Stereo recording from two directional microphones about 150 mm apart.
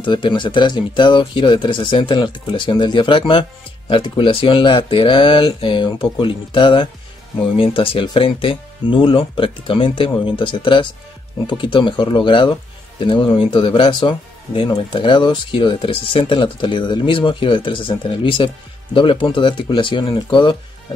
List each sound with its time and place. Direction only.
0.0 s speech: 35° left (ahead or behind)